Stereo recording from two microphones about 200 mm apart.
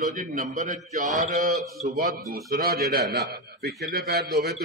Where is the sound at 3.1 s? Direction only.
50° right (ahead or behind).